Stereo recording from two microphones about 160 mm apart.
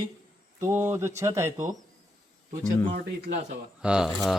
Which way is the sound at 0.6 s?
15° right (ahead or behind).